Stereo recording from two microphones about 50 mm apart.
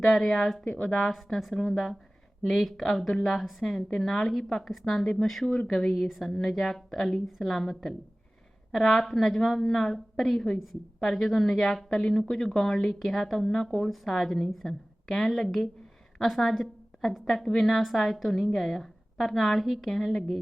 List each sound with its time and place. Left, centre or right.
0.0 s a woman's voice: centre
0.6 s a woman's voice: centre
1.1 s a woman's voice: centre
5.5 s a woman's voice: centre